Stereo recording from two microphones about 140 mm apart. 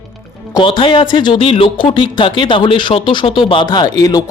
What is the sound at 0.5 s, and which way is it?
Speech, 35° left (ahead or behind).